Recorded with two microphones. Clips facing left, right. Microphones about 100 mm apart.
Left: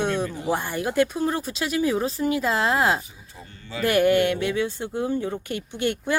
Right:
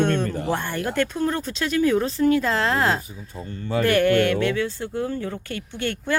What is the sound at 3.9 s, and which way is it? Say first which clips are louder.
Speech: even; 15° left (ahead or behind).